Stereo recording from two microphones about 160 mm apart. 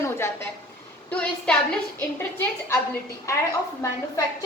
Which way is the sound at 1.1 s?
5° left (ahead or behind).